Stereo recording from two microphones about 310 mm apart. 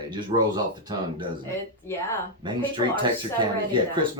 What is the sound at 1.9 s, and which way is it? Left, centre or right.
Speech, centre.